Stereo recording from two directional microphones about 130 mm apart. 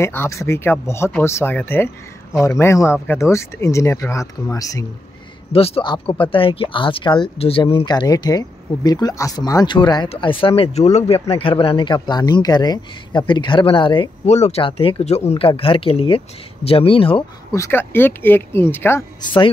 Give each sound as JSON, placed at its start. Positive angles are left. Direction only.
{"t": 0.0, "sound": "speech", "side_deg": 20}
{"t": 5.5, "sound": "speech", "side_deg": 50}
{"t": 10.0, "sound": "speech", "side_deg": 45}
{"t": 14.2, "sound": "speech", "side_deg": 60}
{"t": 14.6, "sound": "speech", "side_deg": 45}
{"t": 17.5, "sound": "speech", "side_deg": 20}